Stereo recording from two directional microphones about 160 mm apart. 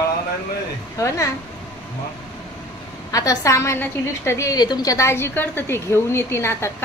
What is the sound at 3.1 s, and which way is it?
A woman's voice, 20° left (ahead or behind).